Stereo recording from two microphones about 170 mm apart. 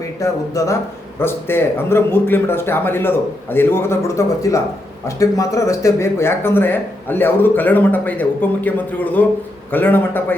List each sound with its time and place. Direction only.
0.2 s speech: 20° left (ahead or behind)